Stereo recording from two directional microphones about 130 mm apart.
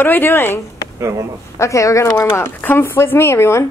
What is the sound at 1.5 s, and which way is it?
Speech, 25° left (ahead or behind).